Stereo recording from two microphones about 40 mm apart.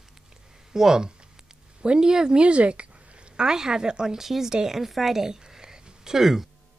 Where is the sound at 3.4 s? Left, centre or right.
Centre.